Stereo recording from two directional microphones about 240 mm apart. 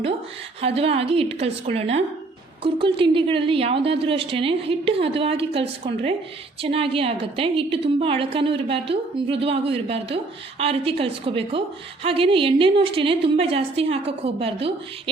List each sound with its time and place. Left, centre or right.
0.6 s a woman's voice: right